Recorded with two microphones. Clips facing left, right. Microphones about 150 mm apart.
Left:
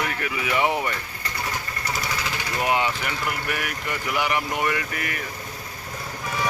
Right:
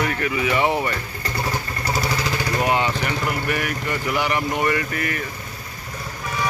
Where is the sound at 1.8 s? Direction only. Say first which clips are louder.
Right 6 dB; 35° right (ahead or behind).